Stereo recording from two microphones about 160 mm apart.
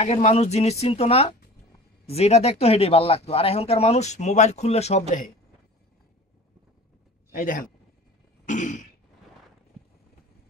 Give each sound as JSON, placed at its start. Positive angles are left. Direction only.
{"t": 0.0, "sound": "speech", "side_deg": 45}
{"t": 7.3, "sound": "a man's voice", "side_deg": 55}